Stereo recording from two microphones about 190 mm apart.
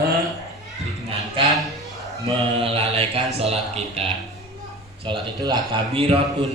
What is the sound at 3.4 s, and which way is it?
Speech, 30° right (ahead or behind).